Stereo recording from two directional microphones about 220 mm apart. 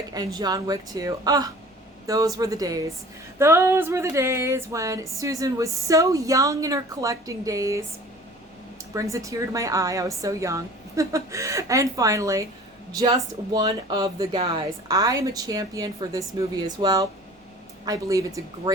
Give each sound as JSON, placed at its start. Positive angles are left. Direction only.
{"t": 0.3, "sound": "a woman's voice", "side_deg": -15}
{"t": 8.9, "sound": "a woman's voice", "side_deg": -15}